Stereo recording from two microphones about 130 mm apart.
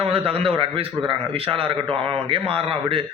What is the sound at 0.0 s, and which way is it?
A man's voice, 45° right (ahead or behind).